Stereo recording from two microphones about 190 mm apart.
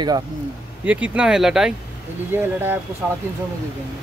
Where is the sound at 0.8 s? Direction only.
5° right (ahead or behind).